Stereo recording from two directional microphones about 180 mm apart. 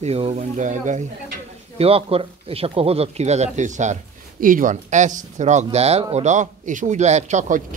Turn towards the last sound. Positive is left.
turn(degrees=-45)  # may be behind; listen again after turning